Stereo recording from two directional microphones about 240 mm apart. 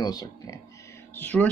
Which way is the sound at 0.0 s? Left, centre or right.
Centre.